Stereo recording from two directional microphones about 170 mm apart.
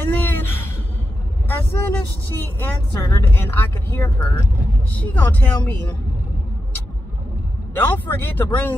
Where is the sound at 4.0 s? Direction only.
25° left (ahead or behind).